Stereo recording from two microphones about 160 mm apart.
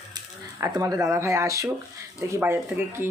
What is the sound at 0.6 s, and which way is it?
Speech, 20° right (ahead or behind).